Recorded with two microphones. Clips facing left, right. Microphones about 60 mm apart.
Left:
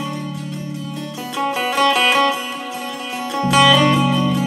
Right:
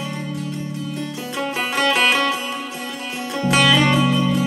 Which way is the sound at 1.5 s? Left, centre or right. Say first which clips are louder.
Left 3 dB; right.